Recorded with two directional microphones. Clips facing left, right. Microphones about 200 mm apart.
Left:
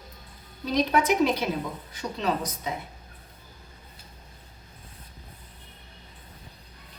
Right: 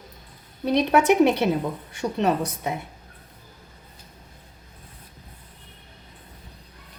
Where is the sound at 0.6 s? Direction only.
65° right (ahead or behind).